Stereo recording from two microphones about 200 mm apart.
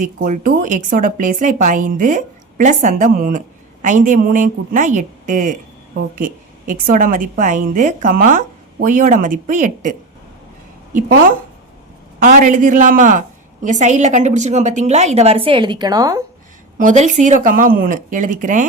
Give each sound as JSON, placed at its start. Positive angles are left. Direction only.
{"t": 0.0, "sound": "a woman's voice", "side_deg": -40}
{"t": 12.2, "sound": "a woman's voice", "side_deg": -45}
{"t": 16.7, "sound": "a woman's voice", "side_deg": -35}